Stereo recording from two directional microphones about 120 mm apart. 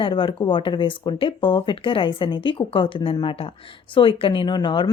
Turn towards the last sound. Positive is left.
turn(degrees=40)  # may be behind; listen again after turning